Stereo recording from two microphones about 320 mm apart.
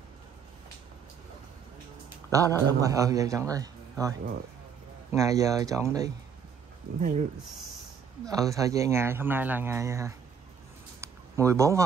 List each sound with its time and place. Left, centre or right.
2.3 s speech: centre
5.1 s speech: centre
7.0 s speech: right
8.3 s speech: centre
11.0 s a sound: centre